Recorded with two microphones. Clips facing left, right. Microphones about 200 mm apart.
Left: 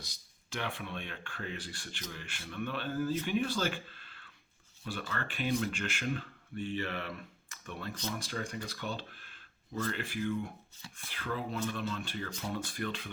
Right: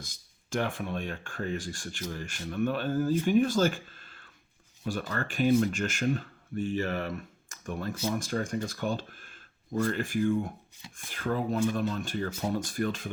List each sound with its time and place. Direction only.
0.0 s speech: 50° right (ahead or behind)